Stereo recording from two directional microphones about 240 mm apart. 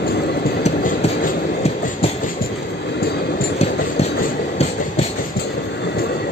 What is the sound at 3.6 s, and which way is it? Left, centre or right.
Train, left.